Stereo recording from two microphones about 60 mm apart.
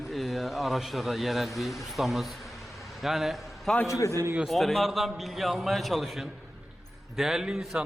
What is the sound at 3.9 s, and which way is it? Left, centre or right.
Speech, left.